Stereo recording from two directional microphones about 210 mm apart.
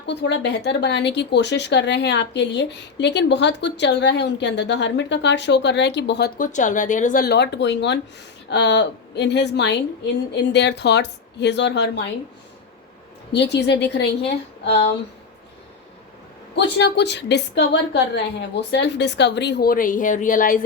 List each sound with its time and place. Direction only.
0.0 s speech: 55° left (ahead or behind)
13.3 s speech: 55° left (ahead or behind)
16.6 s a woman's voice: 55° left (ahead or behind)